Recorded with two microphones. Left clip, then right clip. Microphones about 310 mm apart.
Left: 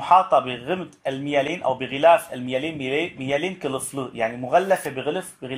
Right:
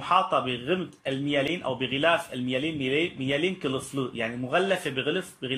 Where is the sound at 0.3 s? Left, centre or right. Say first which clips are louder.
Left 5 dB; centre.